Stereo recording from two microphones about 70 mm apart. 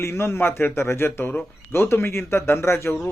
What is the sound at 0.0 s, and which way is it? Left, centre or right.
A man's voice, left.